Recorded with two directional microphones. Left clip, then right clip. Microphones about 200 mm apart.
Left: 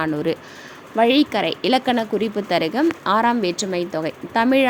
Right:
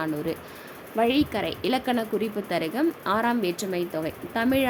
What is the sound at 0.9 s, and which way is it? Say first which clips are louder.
Speech: left 7 dB; 10° left (ahead or behind).